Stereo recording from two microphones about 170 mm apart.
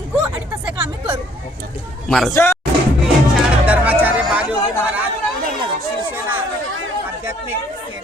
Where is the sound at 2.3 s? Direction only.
15° left (ahead or behind).